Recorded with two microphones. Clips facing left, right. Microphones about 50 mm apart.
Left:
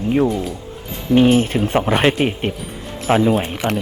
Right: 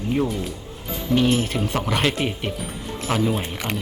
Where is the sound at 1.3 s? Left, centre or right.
Left.